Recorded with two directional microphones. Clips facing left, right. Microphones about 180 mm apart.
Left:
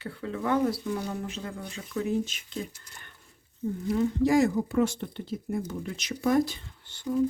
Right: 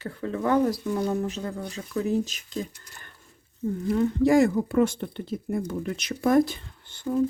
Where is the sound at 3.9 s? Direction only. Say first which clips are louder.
Right 3 dB; 55° right (ahead or behind).